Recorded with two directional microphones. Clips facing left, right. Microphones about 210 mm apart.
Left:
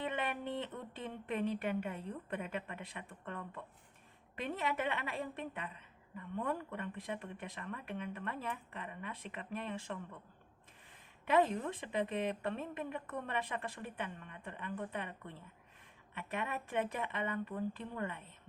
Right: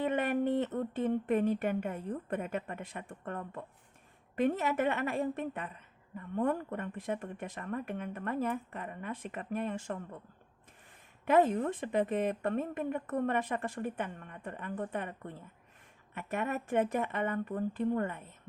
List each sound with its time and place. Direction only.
0.0 s a woman's voice: 45° right (ahead or behind)
11.3 s a woman's voice: 50° right (ahead or behind)